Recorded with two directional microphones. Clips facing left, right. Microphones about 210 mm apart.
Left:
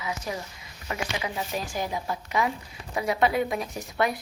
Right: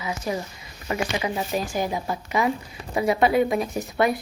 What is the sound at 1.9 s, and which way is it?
A woman's voice, 5° right (ahead or behind).